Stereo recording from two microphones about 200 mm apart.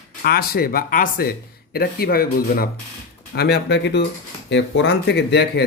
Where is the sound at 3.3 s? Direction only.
55° left (ahead or behind).